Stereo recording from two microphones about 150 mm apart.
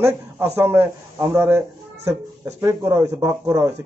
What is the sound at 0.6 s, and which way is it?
A man's voice, 15° right (ahead or behind).